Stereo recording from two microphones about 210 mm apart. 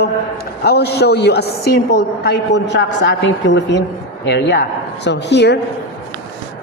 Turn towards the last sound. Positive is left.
turn(degrees=55)  # may be behind; listen again after turning